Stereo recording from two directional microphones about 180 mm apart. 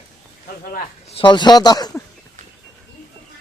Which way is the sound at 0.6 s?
50° left (ahead or behind).